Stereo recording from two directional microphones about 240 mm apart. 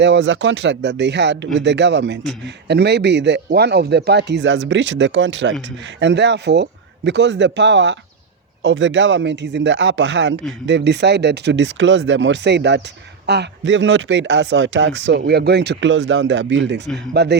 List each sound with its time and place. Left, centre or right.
0.0 s speech: right